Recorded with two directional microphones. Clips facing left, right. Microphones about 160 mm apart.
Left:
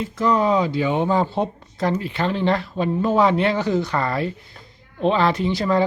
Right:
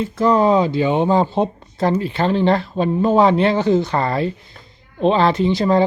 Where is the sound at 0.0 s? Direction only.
30° right (ahead or behind).